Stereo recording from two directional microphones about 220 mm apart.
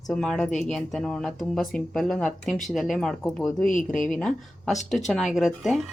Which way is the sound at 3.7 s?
35° left (ahead or behind).